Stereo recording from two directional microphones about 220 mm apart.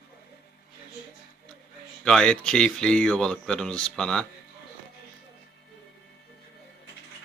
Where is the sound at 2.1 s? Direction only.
5° left (ahead or behind).